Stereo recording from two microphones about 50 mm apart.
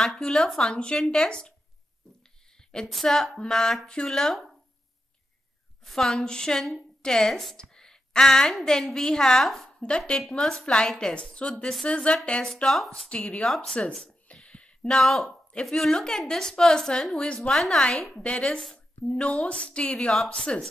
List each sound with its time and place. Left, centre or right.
0.0 s a woman's voice: centre
2.9 s a woman's voice: centre
5.9 s a woman's voice: centre
7.5 s a sound: centre
8.6 s a woman's voice: centre
9.8 s a woman's voice: centre
11.8 s a woman's voice: left
12.8 s a woman's voice: centre
13.2 s a woman's voice: centre
14.0 s a sound: left
14.9 s a woman's voice: centre
18.2 s a woman's voice: left